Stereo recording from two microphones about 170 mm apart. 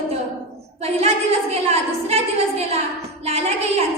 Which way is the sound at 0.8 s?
40° right (ahead or behind).